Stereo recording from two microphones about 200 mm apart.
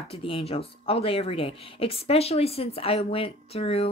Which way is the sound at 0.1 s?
30° left (ahead or behind).